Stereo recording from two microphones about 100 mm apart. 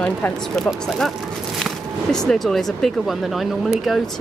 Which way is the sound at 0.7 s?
Centre (ahead or behind).